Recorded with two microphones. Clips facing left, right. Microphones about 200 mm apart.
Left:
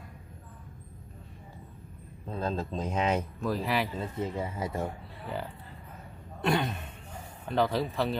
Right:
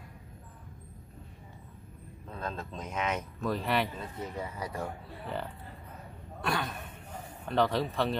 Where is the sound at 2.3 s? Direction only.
30° left (ahead or behind).